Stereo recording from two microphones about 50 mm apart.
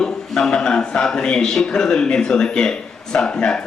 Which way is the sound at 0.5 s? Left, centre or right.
Centre.